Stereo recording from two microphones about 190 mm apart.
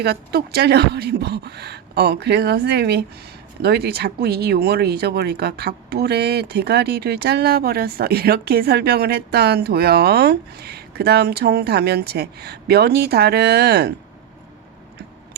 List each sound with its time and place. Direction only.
0.0 s speech: 55° right (ahead or behind)